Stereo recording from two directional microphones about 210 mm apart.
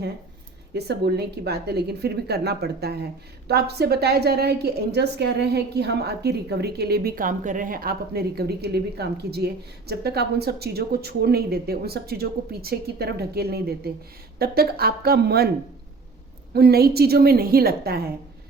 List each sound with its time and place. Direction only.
0.7 s speech: 50° right (ahead or behind)
16.6 s speech: 50° right (ahead or behind)